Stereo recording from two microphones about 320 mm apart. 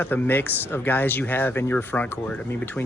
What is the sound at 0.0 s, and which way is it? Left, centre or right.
Speech, centre.